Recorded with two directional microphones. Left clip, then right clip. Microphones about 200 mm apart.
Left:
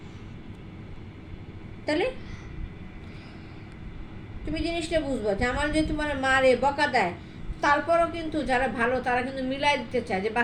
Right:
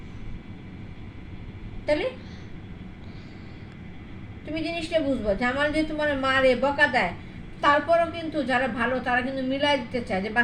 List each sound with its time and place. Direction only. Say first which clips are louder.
4.5 s a woman's voice: right 1 dB; 45° left (ahead or behind)